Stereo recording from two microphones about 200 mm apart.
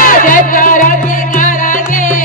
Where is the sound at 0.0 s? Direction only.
40° left (ahead or behind).